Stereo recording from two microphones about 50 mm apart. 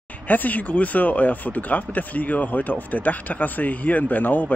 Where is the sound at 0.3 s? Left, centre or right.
Left.